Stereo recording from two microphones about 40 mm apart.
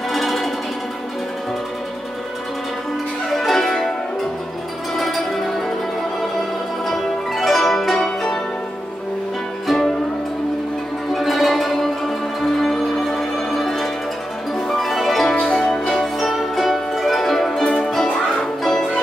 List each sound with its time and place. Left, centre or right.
0.1 s music: centre
3.3 s music: centre
4.9 s music: centre
6.9 s music: centre
9.7 s music: centre
11.1 s music: centre
15.3 s music: centre
16.2 s music: centre